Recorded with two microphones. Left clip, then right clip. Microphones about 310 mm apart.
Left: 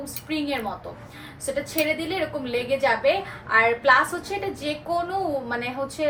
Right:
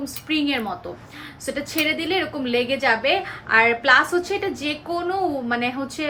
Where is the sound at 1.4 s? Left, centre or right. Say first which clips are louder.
Right 1 dB; right.